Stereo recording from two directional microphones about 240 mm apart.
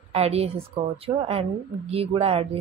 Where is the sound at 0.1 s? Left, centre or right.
Right.